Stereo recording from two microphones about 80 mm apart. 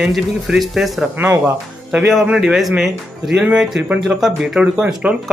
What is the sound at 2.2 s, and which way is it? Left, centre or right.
Speech, centre.